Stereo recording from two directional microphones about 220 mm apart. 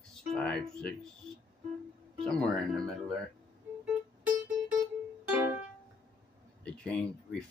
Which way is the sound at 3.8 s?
5° right (ahead or behind).